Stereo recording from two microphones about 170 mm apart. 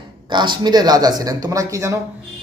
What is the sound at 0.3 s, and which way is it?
Speech, 25° right (ahead or behind).